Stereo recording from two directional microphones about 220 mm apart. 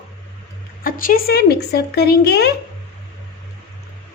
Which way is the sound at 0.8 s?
40° left (ahead or behind).